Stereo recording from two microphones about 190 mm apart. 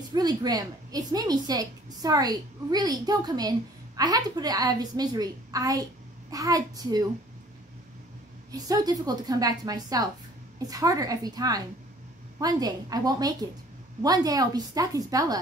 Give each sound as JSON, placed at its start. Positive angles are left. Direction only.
{"t": 0.1, "sound": "a woman's voice", "side_deg": -20}
{"t": 8.5, "sound": "a woman's voice", "side_deg": -20}